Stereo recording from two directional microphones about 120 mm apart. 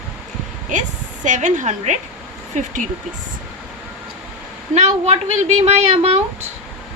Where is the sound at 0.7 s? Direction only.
90° right.